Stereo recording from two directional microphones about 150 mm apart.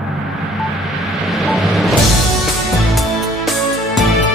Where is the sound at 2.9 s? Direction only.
Centre (ahead or behind).